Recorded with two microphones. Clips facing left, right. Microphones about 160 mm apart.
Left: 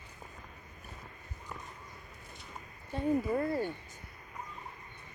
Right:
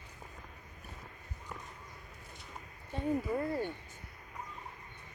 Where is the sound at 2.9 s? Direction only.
40° left (ahead or behind).